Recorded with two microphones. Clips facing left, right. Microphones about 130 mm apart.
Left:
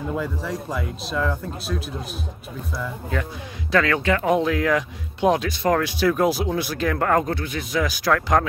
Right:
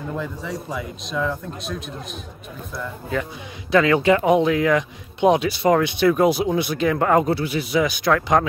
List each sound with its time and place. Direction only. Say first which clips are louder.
0.1 s speech: left 1 dB; centre (ahead or behind)
3.7 s speech: right 4 dB; 10° right (ahead or behind)
4.3 s speech: right 3 dB; centre (ahead or behind)